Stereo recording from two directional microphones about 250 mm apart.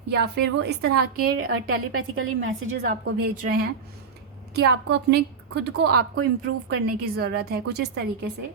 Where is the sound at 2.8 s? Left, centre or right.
Right.